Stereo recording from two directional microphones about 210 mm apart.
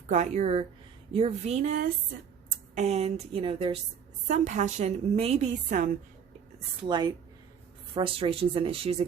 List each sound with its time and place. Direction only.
0.1 s a woman's voice: 35° right (ahead or behind)
6.8 s speech: 20° right (ahead or behind)